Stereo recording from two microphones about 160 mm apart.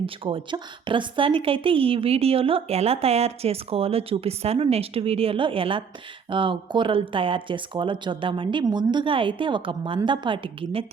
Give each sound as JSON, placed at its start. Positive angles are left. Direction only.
{"t": 0.0, "sound": "a woman's voice", "side_deg": -35}